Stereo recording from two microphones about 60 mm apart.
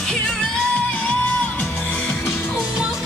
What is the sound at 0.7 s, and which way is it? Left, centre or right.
Music, left.